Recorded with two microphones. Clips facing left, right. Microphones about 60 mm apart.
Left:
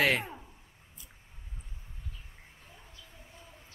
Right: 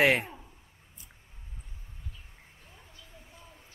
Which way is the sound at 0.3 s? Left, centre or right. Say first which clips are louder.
Left 1 dB; centre.